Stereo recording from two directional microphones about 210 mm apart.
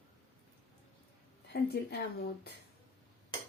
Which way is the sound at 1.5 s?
50° left (ahead or behind).